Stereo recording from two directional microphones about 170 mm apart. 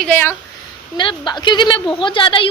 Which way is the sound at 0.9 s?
30° left (ahead or behind).